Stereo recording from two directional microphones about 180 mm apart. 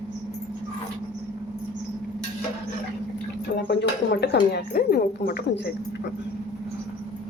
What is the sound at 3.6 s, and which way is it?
Speech, 65° left (ahead or behind).